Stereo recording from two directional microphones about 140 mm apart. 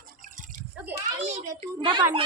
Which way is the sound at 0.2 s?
70° right (ahead or behind).